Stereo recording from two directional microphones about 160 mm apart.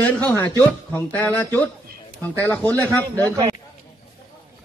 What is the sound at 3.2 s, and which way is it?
Speech, 20° right (ahead or behind).